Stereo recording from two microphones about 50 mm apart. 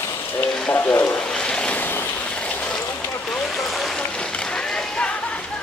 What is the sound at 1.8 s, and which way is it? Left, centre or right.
Vehicle, left.